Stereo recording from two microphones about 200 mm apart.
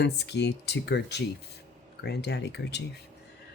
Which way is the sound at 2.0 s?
55° left (ahead or behind).